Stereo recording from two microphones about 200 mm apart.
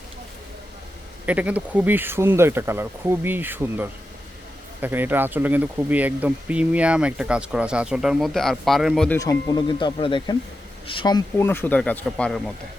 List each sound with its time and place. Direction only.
1.3 s speech: 5° right (ahead or behind)
9.1 s speech: 15° left (ahead or behind)